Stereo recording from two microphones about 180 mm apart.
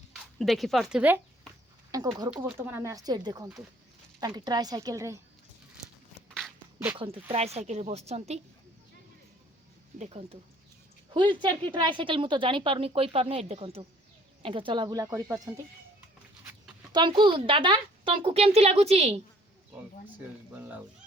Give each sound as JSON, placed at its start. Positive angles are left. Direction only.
{"t": 0.1, "sound": "speech", "side_deg": 0}
{"t": 1.9, "sound": "a woman's voice", "side_deg": -20}
{"t": 7.0, "sound": "speech", "side_deg": -30}
{"t": 10.0, "sound": "a woman's voice", "side_deg": -30}
{"t": 16.9, "sound": "a woman's voice", "side_deg": -25}
{"t": 20.6, "sound": "speech", "side_deg": -10}